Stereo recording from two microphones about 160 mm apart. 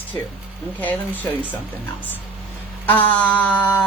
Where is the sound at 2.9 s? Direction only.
10° left (ahead or behind).